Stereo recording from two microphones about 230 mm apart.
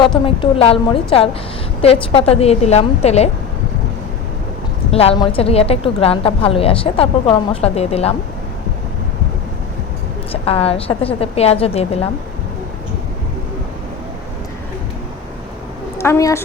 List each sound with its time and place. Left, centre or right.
0.3 s a woman's voice: left
4.9 s a woman's voice: left
10.4 s a woman's voice: left
16.0 s a woman's voice: centre